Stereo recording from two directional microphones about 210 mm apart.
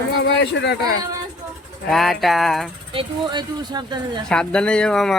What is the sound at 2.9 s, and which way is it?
Speech, 25° right (ahead or behind).